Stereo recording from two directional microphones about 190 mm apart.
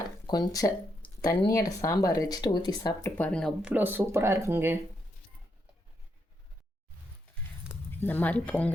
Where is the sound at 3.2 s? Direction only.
5° left (ahead or behind); by 4.7 s 10° right (ahead or behind).